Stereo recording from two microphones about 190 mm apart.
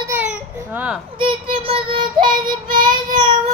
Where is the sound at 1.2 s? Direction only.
25° right (ahead or behind).